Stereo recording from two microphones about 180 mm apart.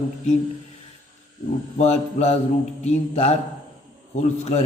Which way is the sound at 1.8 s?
35° left (ahead or behind).